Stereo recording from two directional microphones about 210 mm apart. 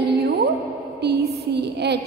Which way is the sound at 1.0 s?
50° right (ahead or behind).